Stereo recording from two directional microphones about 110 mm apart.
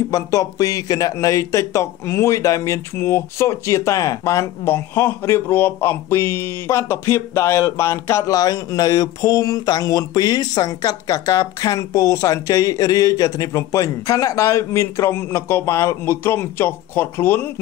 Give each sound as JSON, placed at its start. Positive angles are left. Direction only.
{"t": 0.1, "sound": "speech", "side_deg": 30}